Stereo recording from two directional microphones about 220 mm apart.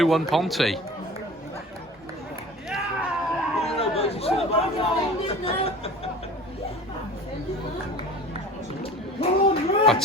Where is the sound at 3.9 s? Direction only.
25° left (ahead or behind).